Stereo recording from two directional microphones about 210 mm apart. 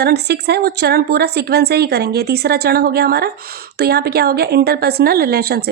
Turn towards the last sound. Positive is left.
turn(degrees=-50)  # may be behind; listen again after turning